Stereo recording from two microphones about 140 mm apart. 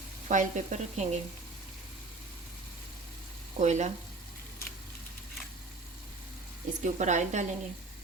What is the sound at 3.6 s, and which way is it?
Speech, 55° right (ahead or behind).